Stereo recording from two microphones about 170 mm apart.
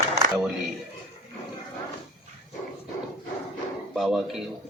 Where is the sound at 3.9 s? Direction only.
Centre (ahead or behind).